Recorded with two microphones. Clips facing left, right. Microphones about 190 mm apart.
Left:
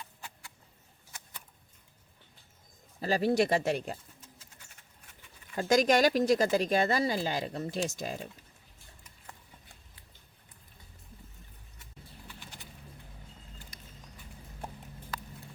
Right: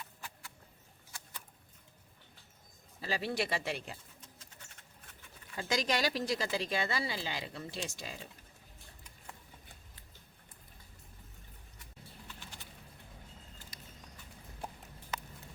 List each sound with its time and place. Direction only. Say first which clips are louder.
1.1 s vehicle: left 1 dB; 20° left (ahead or behind)
3.0 s speech: left 9 dB; 45° left (ahead or behind)
4.6 s a sound: right 1 dB; 10° left (ahead or behind)
5.5 s speech: left 9 dB; 45° left (ahead or behind)
12.4 s bird: left 1 dB; 15° left (ahead or behind)